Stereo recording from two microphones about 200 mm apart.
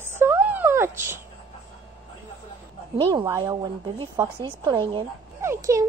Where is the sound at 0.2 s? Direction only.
10° right (ahead or behind).